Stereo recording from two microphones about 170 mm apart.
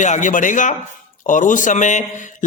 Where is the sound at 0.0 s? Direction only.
45° left (ahead or behind).